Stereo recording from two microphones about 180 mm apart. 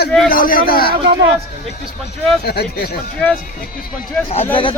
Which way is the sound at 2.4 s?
60° left (ahead or behind).